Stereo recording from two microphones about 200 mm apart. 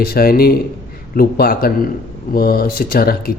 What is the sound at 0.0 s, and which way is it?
A man's voice, 50° left (ahead or behind).